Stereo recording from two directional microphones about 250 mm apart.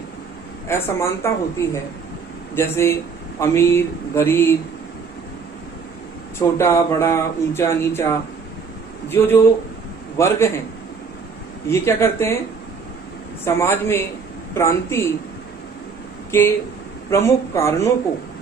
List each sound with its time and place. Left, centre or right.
0.7 s speech: centre
6.6 s speech: centre
9.1 s speech: centre
11.7 s speech: centre
13.5 s speech: centre
16.3 s speech: centre